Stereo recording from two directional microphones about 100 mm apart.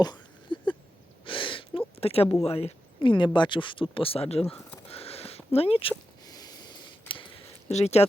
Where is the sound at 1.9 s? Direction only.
80° left; by 3.8 s 55° left (ahead or behind).